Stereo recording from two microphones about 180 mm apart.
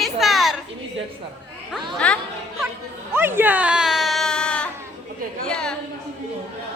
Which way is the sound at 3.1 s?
10° right (ahead or behind).